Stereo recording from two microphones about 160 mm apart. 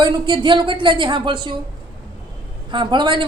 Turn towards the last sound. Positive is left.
turn(degrees=-30)  # may be behind; listen again after turning